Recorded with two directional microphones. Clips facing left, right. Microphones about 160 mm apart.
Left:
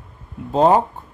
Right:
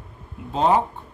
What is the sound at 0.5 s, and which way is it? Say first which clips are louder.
Speech: left 5 dB; 45° left (ahead or behind).